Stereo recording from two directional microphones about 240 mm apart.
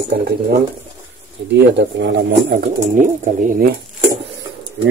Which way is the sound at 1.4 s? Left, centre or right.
Right.